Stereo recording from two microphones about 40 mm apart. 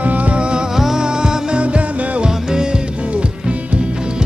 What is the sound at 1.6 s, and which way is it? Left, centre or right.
Music, right.